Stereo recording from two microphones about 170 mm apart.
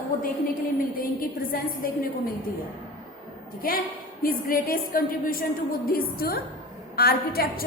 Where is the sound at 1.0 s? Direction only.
60° left (ahead or behind).